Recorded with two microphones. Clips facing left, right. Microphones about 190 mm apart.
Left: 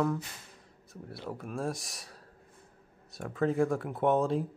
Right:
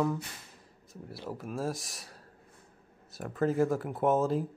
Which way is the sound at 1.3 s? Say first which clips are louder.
Right 1 dB; centre (ahead or behind).